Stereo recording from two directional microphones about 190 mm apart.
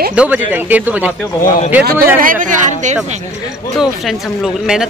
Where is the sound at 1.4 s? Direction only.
45° left (ahead or behind).